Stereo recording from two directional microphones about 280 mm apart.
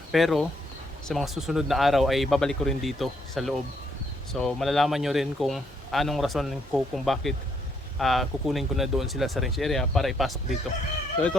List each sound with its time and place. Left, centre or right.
0.1 s a man's voice: centre